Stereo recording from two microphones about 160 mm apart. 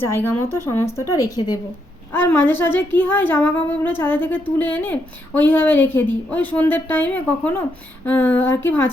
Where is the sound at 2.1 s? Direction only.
10° left (ahead or behind).